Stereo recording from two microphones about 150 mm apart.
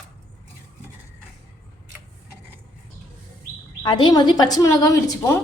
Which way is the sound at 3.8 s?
30° left (ahead or behind).